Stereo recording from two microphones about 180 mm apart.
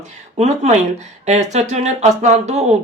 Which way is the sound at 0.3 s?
40° right (ahead or behind).